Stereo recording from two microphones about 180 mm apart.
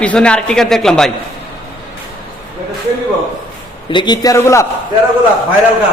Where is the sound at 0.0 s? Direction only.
5° left (ahead or behind).